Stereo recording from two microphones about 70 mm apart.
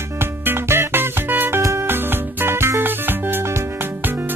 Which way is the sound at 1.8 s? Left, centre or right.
Right.